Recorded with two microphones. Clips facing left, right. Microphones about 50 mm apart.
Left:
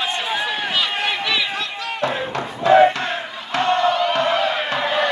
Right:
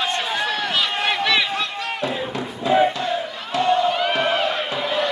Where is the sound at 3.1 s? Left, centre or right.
Left.